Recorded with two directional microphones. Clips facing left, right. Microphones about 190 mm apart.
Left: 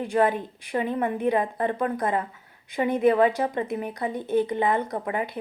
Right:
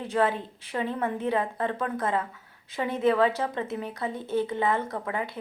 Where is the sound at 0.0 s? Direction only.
15° left (ahead or behind).